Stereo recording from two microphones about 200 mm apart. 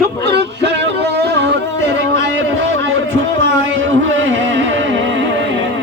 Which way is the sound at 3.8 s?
70° right (ahead or behind).